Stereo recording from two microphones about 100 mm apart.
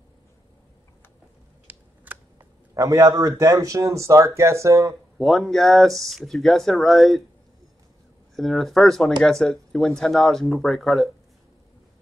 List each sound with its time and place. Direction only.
1.7 s a sound: 15° right (ahead or behind)
2.3 s a man's voice: 35° right (ahead or behind)
5.2 s speech: centre (ahead or behind)
8.4 s speech: centre (ahead or behind)